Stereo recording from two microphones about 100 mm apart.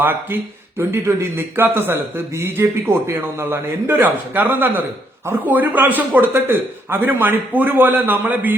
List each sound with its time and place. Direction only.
0.0 s a man's voice: 20° right (ahead or behind)